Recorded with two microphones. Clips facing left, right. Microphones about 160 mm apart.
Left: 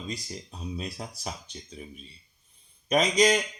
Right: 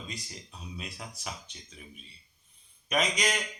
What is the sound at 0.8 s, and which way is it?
A man's voice, 35° left (ahead or behind).